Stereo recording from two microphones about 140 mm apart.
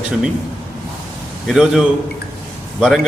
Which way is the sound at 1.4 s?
5° right (ahead or behind).